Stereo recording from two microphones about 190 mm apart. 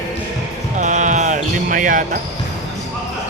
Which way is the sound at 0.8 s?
40° right (ahead or behind).